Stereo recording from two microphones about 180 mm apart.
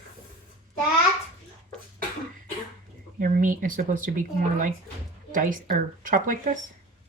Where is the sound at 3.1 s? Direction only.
50° right (ahead or behind).